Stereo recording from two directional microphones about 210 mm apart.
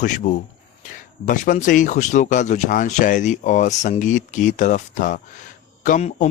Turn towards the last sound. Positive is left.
turn(degrees=35)  # may be behind; listen again after turning